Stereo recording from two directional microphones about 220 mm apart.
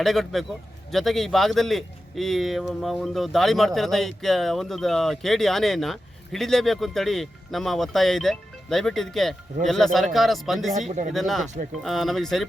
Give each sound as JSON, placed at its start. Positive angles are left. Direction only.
{"t": 0.0, "sound": "speech", "side_deg": 0}
{"t": 10.8, "sound": "speech", "side_deg": -35}
{"t": 11.1, "sound": "speech", "side_deg": 0}